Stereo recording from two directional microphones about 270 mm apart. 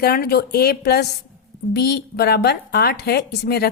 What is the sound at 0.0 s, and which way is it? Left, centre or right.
A woman's voice, left.